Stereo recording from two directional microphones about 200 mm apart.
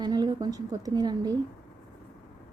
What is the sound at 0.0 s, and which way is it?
Speech, 20° right (ahead or behind).